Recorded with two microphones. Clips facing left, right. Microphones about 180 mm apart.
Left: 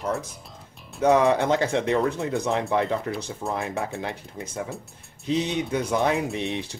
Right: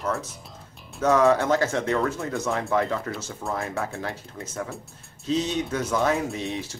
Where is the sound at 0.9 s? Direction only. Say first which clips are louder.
Even; 15° left (ahead or behind).